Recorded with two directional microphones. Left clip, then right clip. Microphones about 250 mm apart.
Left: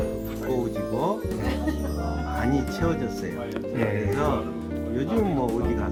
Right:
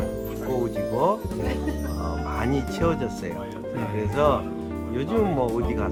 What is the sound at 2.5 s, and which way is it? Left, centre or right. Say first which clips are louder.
Speech: right 3 dB; right.